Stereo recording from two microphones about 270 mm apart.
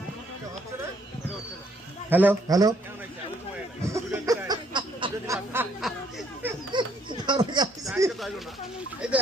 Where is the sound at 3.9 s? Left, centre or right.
Centre.